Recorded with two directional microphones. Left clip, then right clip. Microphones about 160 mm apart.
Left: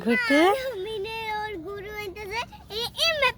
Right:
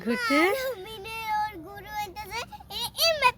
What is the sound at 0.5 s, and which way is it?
Child singing, 30° right (ahead or behind).